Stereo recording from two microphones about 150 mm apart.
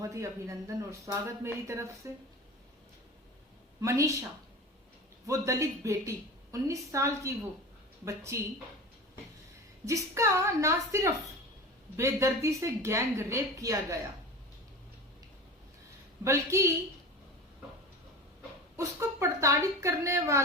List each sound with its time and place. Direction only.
0.0 s a woman's voice: 20° right (ahead or behind)
3.8 s a woman's voice: 20° right (ahead or behind)
9.8 s a woman's voice: 20° right (ahead or behind)
16.2 s a woman's voice: 20° right (ahead or behind)
18.8 s a woman's voice: 20° right (ahead or behind)